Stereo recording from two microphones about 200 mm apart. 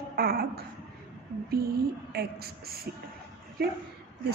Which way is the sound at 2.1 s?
50° right (ahead or behind).